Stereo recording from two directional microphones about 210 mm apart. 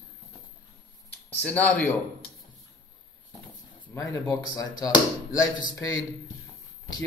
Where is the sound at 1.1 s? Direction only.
5° left (ahead or behind).